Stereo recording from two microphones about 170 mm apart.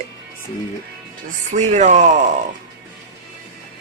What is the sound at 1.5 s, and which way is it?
Speech, 45° right (ahead or behind).